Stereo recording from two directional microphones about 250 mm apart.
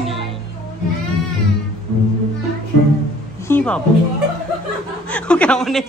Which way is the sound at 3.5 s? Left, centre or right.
Centre.